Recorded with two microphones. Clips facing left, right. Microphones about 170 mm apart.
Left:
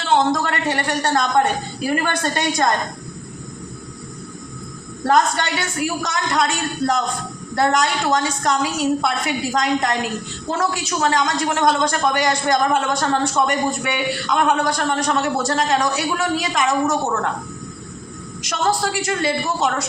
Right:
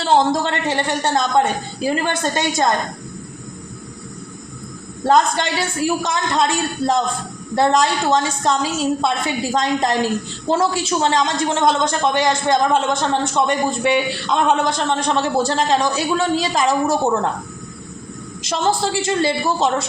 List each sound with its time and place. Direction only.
0.0 s a man's voice: 30° right (ahead or behind)
5.0 s a woman's voice: 25° right (ahead or behind)
18.4 s a woman's voice: 25° right (ahead or behind)